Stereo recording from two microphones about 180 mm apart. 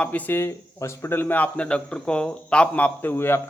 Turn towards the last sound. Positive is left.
turn(degrees=15)  # may be behind; listen again after turning